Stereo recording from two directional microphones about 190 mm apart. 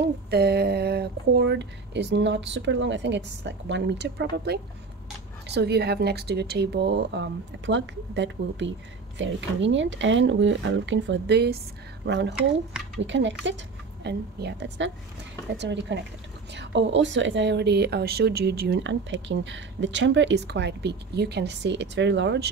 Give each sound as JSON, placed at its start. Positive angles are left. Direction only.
{"t": 0.3, "sound": "speech", "side_deg": -55}